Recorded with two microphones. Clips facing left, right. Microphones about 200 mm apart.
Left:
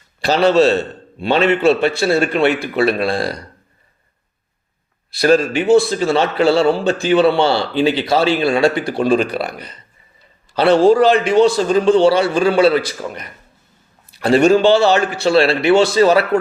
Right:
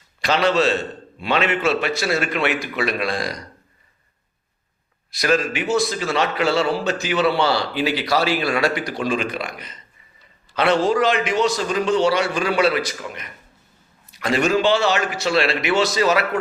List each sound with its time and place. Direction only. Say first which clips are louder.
0.2 s a man's voice: left 6 dB; 35° left (ahead or behind)
5.1 s a man's voice: left 7 dB; 30° left (ahead or behind)